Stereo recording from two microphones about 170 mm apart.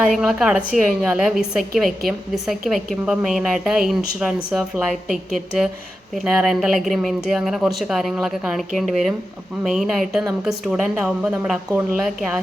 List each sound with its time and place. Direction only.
0.1 s speech: centre (ahead or behind)